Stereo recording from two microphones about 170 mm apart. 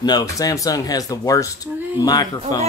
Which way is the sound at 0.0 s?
20° left (ahead or behind).